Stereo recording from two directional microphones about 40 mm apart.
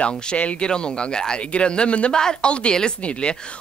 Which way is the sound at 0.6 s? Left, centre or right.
Left.